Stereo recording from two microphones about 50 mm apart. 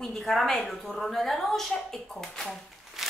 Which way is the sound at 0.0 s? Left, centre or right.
Centre.